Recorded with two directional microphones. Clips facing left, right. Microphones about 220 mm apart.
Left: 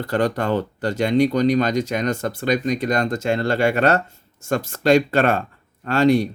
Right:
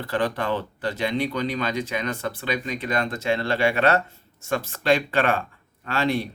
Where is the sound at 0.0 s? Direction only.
45° left (ahead or behind).